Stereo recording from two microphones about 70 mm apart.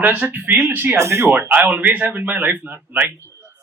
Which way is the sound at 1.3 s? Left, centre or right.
Right.